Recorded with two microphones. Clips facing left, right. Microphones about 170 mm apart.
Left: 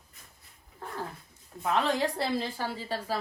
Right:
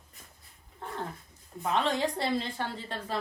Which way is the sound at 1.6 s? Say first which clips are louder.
Left 1 dB; centre (ahead or behind).